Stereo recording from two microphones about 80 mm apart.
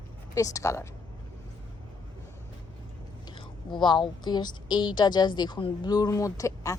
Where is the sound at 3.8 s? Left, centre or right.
Left.